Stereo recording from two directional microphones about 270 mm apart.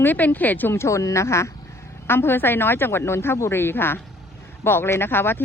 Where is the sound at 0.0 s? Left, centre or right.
Centre.